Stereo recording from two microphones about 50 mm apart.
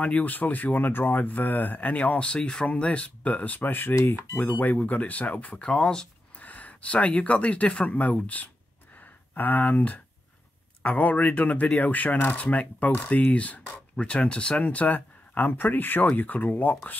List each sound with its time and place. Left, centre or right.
0.0 s speech: left
5.7 s speech: centre
6.4 s speech: left
14.6 s speech: left